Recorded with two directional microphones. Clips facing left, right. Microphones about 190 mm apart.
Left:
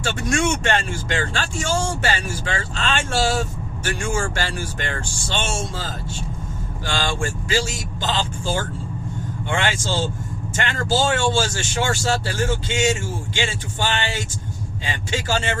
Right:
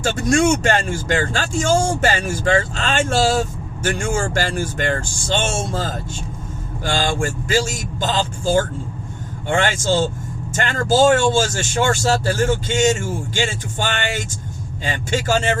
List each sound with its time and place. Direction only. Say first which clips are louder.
0.0 s speech: right 5 dB; 40° right (ahead or behind)